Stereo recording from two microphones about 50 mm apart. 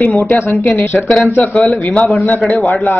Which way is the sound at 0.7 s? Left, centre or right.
Left.